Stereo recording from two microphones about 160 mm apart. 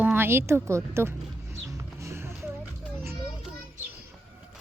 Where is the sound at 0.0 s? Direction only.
10° right (ahead or behind).